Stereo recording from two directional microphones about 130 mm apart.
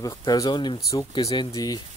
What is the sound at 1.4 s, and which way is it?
Speech, 30° left (ahead or behind).